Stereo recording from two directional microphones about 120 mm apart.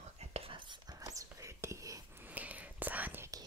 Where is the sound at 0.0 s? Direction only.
65° right (ahead or behind).